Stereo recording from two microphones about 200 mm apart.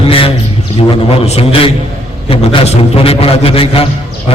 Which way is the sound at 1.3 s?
30° left (ahead or behind).